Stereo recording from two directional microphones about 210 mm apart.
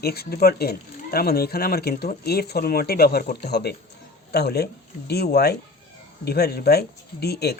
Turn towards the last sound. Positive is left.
turn(degrees=50)  # may be behind; listen again after turning